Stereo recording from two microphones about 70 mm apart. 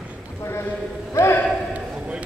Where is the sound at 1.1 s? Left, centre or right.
Left.